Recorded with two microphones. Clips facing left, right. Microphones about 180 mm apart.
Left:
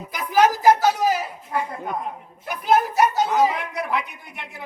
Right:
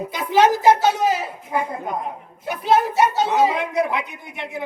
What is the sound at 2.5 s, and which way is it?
Speech, 25° right (ahead or behind).